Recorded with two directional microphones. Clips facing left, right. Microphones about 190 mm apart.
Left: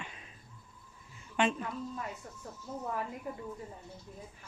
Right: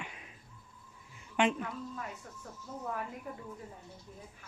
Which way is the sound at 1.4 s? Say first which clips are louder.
Right 1 dB; 15° right (ahead or behind).